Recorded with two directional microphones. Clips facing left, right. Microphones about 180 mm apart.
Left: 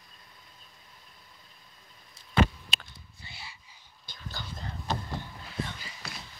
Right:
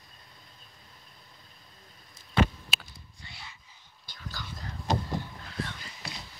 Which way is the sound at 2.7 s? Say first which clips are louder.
Right 1 dB; centre (ahead or behind).